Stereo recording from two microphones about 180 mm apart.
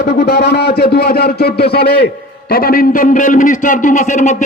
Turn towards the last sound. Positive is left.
turn(degrees=45)  # may be behind; listen again after turning